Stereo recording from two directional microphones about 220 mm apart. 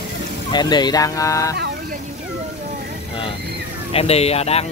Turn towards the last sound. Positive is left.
turn(degrees=30)  # may be behind; listen again after turning